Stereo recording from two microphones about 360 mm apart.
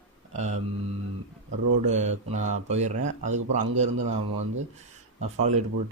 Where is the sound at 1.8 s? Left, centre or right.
Centre.